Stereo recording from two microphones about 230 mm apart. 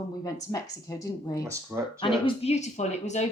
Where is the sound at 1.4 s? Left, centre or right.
Centre.